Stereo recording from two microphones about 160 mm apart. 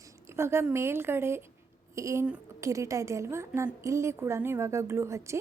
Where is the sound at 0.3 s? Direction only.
15° right (ahead or behind).